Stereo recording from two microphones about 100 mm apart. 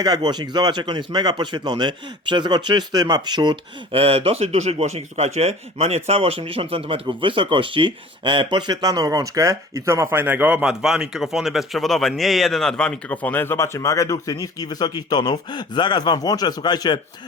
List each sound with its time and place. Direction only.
0.0 s speech: 45° right (ahead or behind)
3.9 s speech: 75° right (ahead or behind); by 17.0 s 45° left (ahead or behind)